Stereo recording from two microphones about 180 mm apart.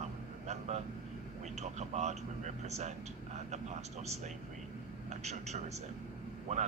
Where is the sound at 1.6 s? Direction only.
40° right (ahead or behind).